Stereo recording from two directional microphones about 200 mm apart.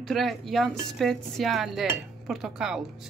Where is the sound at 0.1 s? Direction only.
Centre (ahead or behind).